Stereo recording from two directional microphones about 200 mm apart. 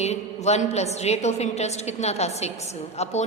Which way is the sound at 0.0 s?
35° left (ahead or behind).